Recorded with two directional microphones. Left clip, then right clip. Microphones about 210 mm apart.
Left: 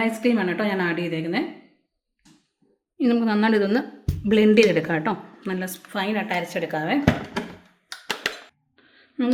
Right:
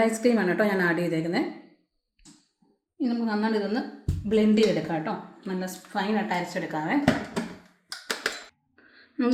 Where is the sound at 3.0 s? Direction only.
45° left (ahead or behind).